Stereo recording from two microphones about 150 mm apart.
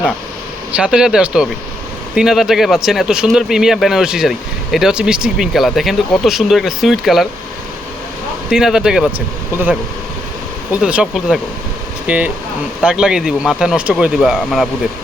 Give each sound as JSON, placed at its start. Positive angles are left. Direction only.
{"t": 0.8, "sound": "speech", "side_deg": -5}
{"t": 8.4, "sound": "speech", "side_deg": -5}